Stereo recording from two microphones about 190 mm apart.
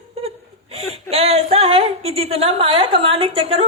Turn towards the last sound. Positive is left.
turn(degrees=-30)  # may be behind; listen again after turning